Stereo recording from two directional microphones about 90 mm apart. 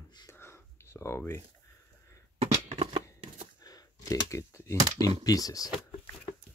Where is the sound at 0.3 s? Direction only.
30° left (ahead or behind).